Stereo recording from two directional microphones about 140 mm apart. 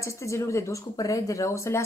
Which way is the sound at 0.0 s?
20° left (ahead or behind).